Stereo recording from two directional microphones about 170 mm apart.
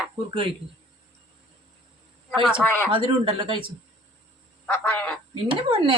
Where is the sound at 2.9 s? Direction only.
30° right (ahead or behind).